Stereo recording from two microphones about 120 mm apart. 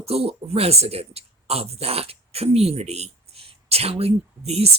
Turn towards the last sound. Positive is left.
turn(degrees=-60)  # may be behind; listen again after turning